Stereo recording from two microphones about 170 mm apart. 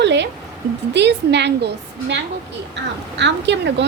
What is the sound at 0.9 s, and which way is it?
A woman's voice, 90° right.